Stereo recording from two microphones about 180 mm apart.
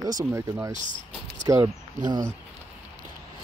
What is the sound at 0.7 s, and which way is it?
Speech, 45° right (ahead or behind).